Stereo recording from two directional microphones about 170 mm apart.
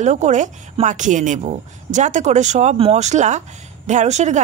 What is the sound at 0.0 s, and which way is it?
A woman's voice, 45° right (ahead or behind).